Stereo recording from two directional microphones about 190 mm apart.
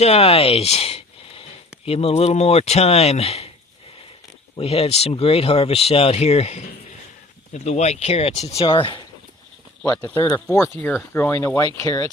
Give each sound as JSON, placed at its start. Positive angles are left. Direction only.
{"t": 0.0, "sound": "speech", "side_deg": 35}
{"t": 4.5, "sound": "speech", "side_deg": 30}
{"t": 9.8, "sound": "speech", "side_deg": 10}